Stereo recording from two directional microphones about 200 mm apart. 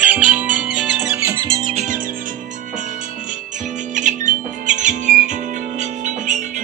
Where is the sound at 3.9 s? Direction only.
40° right (ahead or behind).